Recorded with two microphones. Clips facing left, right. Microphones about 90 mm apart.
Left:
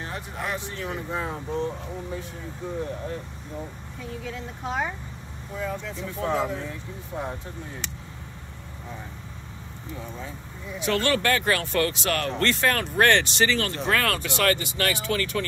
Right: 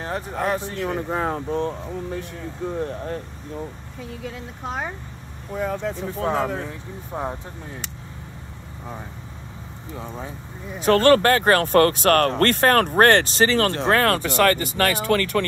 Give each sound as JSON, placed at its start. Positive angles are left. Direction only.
{"t": 0.0, "sound": "speech", "side_deg": -40}
{"t": 0.7, "sound": "speech", "side_deg": -50}
{"t": 5.6, "sound": "speech", "side_deg": -55}
{"t": 6.4, "sound": "speech", "side_deg": -50}
{"t": 10.7, "sound": "speech", "side_deg": -45}